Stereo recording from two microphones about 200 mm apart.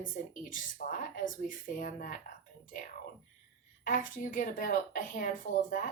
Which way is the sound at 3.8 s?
40° left (ahead or behind).